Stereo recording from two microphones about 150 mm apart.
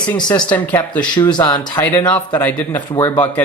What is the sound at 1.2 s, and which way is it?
Speech, 30° left (ahead or behind).